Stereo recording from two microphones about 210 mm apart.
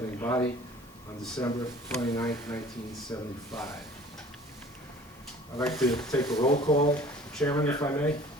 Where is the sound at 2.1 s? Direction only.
15° left (ahead or behind).